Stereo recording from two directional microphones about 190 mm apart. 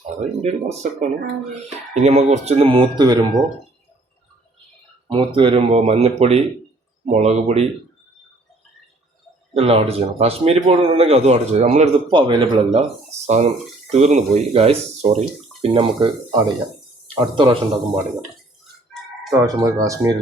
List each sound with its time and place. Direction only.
0.4 s speech: 35° right (ahead or behind)
5.1 s speech: 25° right (ahead or behind)
9.6 s speech: 30° right (ahead or behind)
12.1 s speech: 25° right (ahead or behind)
13.2 s speech: 35° right (ahead or behind)
19.3 s speech: 15° right (ahead or behind)